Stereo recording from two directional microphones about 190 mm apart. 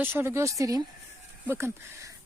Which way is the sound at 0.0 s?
10° right (ahead or behind).